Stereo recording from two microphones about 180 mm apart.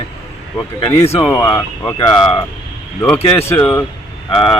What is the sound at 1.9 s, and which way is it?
Speech, 20° left (ahead or behind).